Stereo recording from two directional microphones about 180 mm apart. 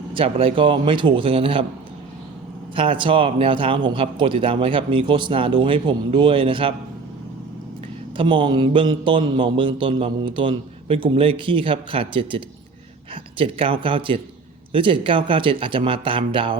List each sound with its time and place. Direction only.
0.1 s speech: 30° right (ahead or behind)
2.7 s speech: 30° right (ahead or behind)
8.1 s speech: 30° right (ahead or behind)
13.4 s speech: 30° right (ahead or behind)